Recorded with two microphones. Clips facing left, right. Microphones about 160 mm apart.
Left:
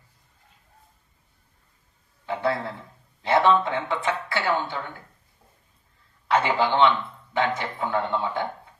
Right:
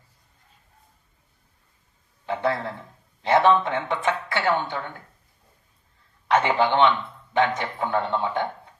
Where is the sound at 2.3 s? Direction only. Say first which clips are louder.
Right 1 dB; 20° right (ahead or behind).